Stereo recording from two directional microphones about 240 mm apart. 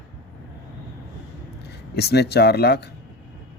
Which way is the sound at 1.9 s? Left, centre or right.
Left.